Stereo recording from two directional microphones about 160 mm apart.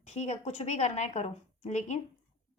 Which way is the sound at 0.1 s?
45° left (ahead or behind).